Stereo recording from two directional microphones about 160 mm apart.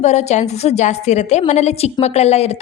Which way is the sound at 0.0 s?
45° left (ahead or behind).